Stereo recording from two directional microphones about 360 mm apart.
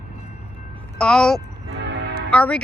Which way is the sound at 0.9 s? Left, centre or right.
Centre.